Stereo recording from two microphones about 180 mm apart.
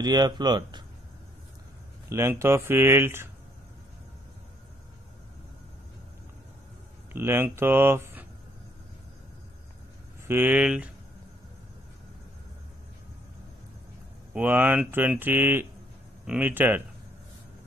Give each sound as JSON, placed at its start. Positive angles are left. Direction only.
{"t": 0.0, "sound": "speech", "side_deg": -20}
{"t": 2.0, "sound": "speech", "side_deg": -15}
{"t": 7.1, "sound": "speech", "side_deg": -15}
{"t": 10.2, "sound": "speech", "side_deg": -10}
{"t": 14.3, "sound": "speech", "side_deg": -10}